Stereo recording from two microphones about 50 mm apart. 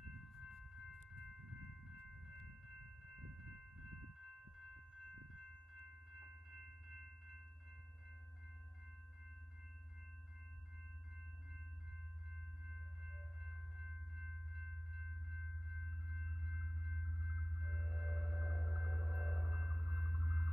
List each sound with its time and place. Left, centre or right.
0.5 s a sound: centre
6.1 s train: centre
12.6 s music: centre